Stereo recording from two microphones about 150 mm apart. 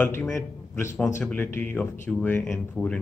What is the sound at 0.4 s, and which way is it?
A man's voice, 15° left (ahead or behind).